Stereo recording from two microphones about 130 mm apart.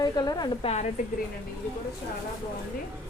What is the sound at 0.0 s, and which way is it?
Speech, 30° left (ahead or behind).